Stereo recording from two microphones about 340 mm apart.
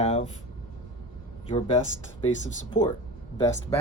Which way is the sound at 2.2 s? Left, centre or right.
Left.